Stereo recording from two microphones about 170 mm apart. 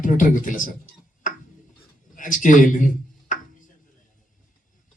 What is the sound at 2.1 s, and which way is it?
Speech, 50° left (ahead or behind).